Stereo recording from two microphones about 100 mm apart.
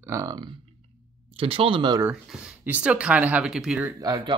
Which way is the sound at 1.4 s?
65° right (ahead or behind).